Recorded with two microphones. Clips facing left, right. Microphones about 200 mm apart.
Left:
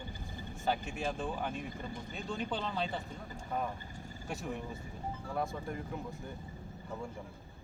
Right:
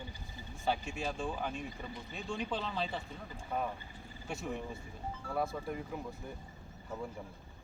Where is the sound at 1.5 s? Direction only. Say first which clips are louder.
Left 1 dB; 50° left (ahead or behind).